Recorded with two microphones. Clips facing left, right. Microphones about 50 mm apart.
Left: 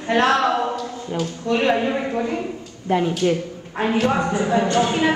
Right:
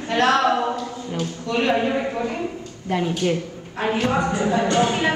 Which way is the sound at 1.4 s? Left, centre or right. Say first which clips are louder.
Left 1 dB; centre.